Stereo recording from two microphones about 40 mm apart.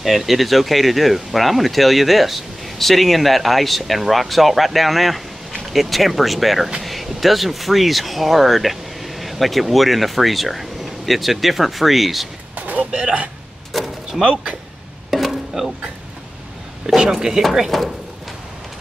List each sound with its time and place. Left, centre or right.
0.0 s speech: centre
12.5 s a sound: right
12.9 s speech: right
13.7 s door: centre
14.2 s speech: right
15.0 s music: centre
16.8 s speech: centre
17.6 s speech: centre